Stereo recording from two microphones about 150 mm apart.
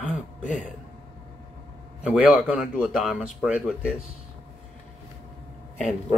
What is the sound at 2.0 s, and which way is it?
Speech, 5° right (ahead or behind).